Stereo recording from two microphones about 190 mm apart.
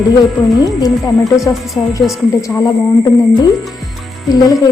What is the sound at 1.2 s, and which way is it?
Speech, centre (ahead or behind).